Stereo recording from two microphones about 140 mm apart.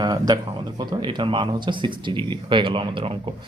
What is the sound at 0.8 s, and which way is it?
Speech, 35° right (ahead or behind).